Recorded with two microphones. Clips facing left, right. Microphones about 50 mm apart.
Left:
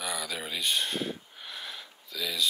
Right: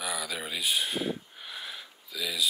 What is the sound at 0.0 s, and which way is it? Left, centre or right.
Speech, centre.